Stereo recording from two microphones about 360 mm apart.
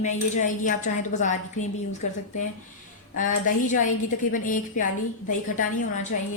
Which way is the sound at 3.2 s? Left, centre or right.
Left.